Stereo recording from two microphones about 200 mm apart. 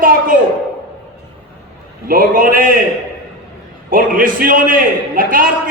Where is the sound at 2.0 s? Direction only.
45° right (ahead or behind).